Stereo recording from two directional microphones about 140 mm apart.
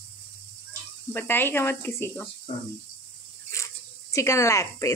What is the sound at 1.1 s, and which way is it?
Speech, 15° left (ahead or behind).